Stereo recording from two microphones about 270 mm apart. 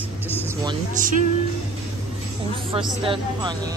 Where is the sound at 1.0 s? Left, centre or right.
Right.